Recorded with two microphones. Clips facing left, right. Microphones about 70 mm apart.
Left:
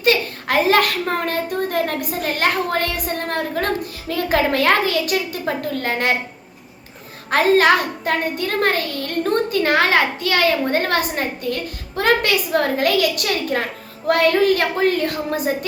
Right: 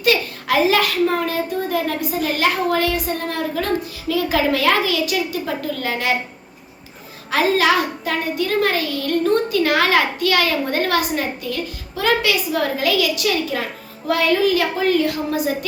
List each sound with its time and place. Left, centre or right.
0.0 s a sound: left
3.1 s a woman's voice: left
7.3 s a child's voice: left